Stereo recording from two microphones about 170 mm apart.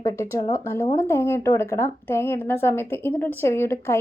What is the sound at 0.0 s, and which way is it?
Speech, 15° left (ahead or behind).